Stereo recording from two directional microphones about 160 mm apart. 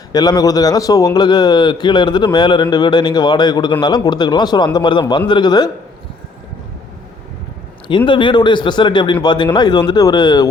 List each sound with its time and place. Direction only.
0.1 s a man's voice: 25° left (ahead or behind)
7.9 s a man's voice: 30° left (ahead or behind)